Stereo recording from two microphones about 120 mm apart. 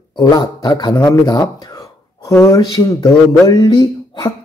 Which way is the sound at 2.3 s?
25° left (ahead or behind).